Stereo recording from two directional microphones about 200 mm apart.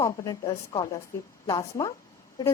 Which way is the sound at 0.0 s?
15° left (ahead or behind).